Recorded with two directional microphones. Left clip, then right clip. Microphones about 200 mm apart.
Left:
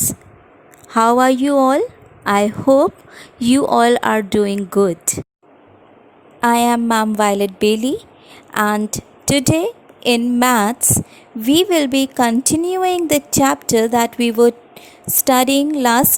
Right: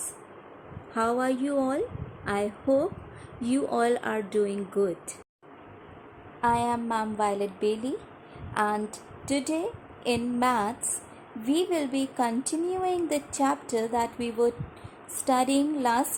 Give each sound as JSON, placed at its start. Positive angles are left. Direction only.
{"t": 0.9, "sound": "a woman's voice", "side_deg": 50}
{"t": 6.4, "sound": "a woman's voice", "side_deg": 55}